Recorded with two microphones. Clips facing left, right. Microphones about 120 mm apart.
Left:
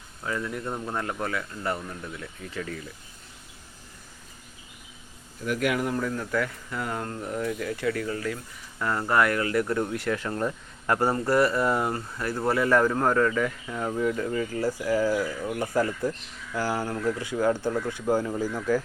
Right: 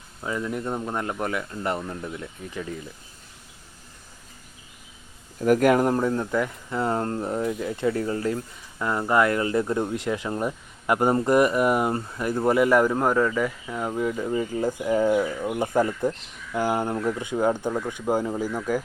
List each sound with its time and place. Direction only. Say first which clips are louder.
0.2 s speech: right 3 dB; 15° right (ahead or behind)
5.4 s speech: right 8 dB; 45° right (ahead or behind)
6.0 s speech: right 4 dB; 30° right (ahead or behind)
8.8 s speech: right 2 dB; 15° right (ahead or behind)